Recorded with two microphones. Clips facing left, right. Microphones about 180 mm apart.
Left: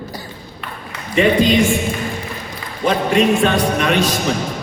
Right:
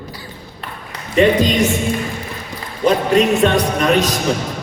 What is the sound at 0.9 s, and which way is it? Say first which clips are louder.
Speech: right 2 dB; 40° right (ahead or behind).